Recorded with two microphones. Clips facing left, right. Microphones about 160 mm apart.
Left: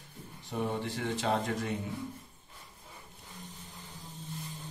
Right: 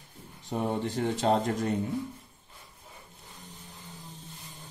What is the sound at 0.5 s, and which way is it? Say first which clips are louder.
Speech: right 4 dB; 45° right (ahead or behind).